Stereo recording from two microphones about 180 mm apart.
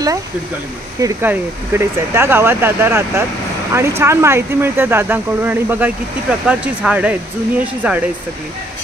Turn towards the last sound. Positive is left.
turn(degrees=-10)  # may be behind; listen again after turning